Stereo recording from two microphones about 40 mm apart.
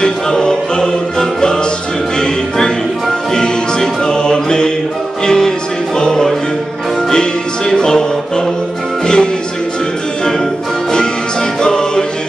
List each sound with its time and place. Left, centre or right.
0.0 s choir: centre
2.1 s music: centre
7.7 s music: centre
9.0 s music: centre
11.6 s music: centre